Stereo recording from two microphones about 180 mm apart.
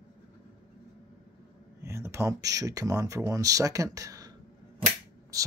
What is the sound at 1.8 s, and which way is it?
Speech, 15° right (ahead or behind).